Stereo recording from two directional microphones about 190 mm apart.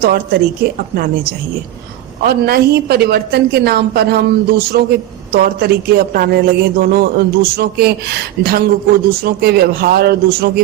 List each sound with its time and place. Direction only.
0.0 s a man's voice: 55° right (ahead or behind)